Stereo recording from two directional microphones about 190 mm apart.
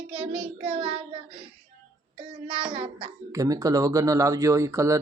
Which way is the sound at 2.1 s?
25° right (ahead or behind).